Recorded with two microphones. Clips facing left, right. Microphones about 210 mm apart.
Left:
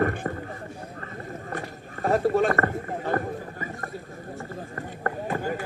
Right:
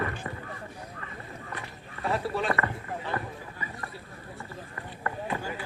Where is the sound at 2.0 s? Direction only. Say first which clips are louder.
Left 7 dB; 45° left (ahead or behind).